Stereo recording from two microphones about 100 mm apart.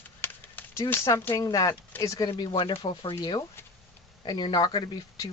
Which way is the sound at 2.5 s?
65° left (ahead or behind).